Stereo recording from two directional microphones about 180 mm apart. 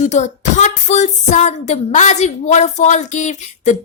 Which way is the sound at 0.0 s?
40° left (ahead or behind).